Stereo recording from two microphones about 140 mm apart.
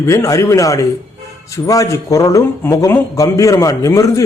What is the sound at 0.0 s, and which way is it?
A man's voice, 20° left (ahead or behind).